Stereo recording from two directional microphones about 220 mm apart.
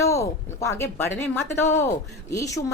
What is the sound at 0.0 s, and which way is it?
Speech, 15° left (ahead or behind).